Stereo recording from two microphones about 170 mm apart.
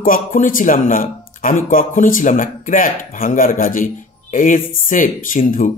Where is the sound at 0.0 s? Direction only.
50° left (ahead or behind).